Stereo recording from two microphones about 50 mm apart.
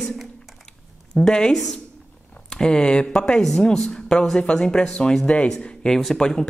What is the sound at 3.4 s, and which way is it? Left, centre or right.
Speech, centre.